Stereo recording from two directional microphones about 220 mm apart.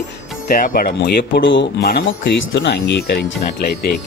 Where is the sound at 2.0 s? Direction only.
60° left (ahead or behind).